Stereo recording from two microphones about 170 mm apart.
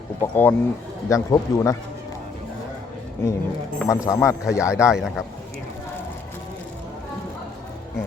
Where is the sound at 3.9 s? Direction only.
20° left (ahead or behind).